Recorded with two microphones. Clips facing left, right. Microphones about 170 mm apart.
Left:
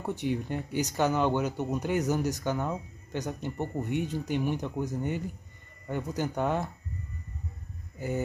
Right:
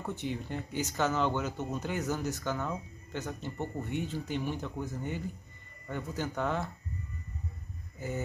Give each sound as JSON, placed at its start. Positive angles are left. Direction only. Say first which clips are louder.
{"t": 0.0, "sound": "speech", "louder": "left 4 dB", "side_deg": 15}
{"t": 0.3, "sound": "speech", "louder": "left 5 dB", "side_deg": 55}
{"t": 0.8, "sound": "speech", "louder": "left 3 dB", "side_deg": 15}